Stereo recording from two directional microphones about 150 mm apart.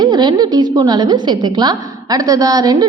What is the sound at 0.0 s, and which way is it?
A woman's voice, 30° right (ahead or behind).